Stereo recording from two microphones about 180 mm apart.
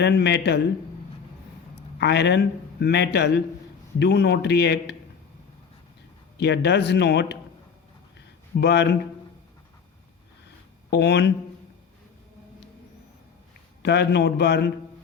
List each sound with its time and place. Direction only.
0.0 s a man's voice: 70° left (ahead or behind)
2.0 s a man's voice: 70° left (ahead or behind)
6.3 s a man's voice: 70° left (ahead or behind)
8.5 s a man's voice: 70° left (ahead or behind)
10.9 s a man's voice: 70° left (ahead or behind)
13.8 s a man's voice: 70° left (ahead or behind)